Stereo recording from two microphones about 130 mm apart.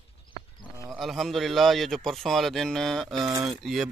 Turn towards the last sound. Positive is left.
turn(degrees=0)  # may be behind; listen again after turning